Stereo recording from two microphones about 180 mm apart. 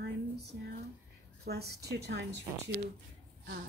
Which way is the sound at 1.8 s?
70° right (ahead or behind).